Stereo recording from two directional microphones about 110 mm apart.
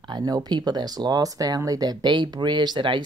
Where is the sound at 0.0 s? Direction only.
40° right (ahead or behind).